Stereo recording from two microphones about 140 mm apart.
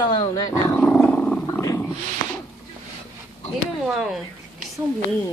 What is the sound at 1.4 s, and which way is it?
Dog, 20° left (ahead or behind).